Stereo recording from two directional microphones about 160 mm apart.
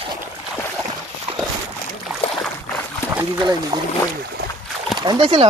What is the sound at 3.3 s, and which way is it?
Speech, 30° right (ahead or behind).